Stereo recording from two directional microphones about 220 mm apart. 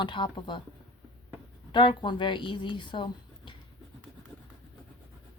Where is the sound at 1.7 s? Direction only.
20° left (ahead or behind).